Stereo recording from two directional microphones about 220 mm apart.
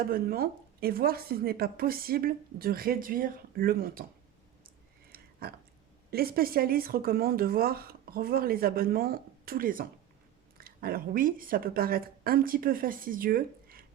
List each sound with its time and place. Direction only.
0.0 s a woman's voice: 45° right (ahead or behind)
5.4 s a woman's voice: 45° right (ahead or behind)